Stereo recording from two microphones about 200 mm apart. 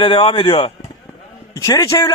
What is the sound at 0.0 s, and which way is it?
A man's voice, 25° left (ahead or behind).